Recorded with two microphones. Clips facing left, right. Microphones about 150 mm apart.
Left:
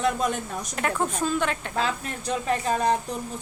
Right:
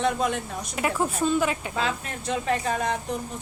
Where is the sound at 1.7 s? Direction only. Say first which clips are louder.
Left 1 dB; 40° left (ahead or behind).